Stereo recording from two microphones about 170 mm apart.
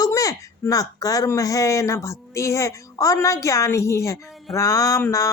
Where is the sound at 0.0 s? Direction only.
20° left (ahead or behind).